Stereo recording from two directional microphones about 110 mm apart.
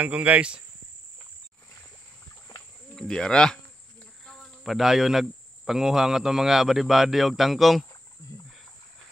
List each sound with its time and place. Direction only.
0.0 s speech: 10° right (ahead or behind)
3.0 s speech: 5° left (ahead or behind)
8.2 s a sound: 30° left (ahead or behind)